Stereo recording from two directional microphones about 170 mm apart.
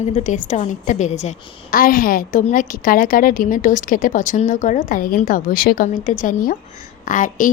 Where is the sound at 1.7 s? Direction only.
55° left (ahead or behind).